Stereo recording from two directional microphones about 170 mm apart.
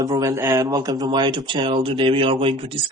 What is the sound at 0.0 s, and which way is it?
A man's voice, 20° right (ahead or behind).